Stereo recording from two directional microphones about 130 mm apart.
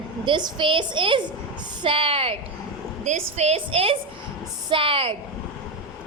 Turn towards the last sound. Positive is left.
turn(degrees=-45)  # may be behind; listen again after turning